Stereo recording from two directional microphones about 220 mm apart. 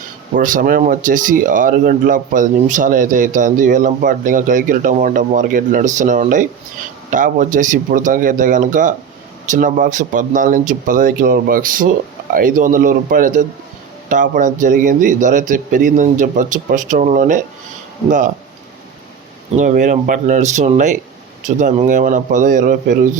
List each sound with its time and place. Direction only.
0.3 s speech: 35° right (ahead or behind)
19.5 s speech: 35° right (ahead or behind)